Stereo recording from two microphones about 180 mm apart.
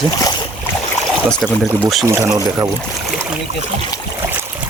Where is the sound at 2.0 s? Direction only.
20° right (ahead or behind).